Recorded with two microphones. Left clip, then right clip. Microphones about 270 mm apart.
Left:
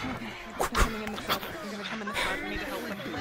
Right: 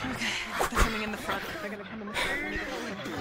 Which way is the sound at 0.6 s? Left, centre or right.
Centre.